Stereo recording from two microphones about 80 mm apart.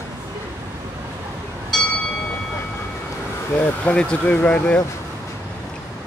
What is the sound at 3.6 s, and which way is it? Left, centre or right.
Speech, centre.